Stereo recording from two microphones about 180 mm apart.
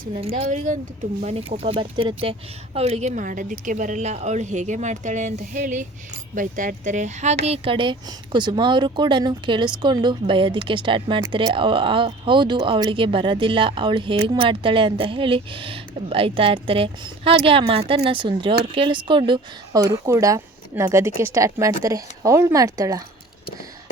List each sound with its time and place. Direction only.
0.2 s speech: 30° right (ahead or behind)